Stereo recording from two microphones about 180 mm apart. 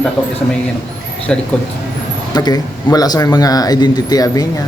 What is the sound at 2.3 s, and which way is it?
Speech, 20° left (ahead or behind).